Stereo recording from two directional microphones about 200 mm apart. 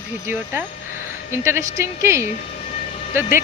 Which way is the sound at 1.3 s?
15° right (ahead or behind).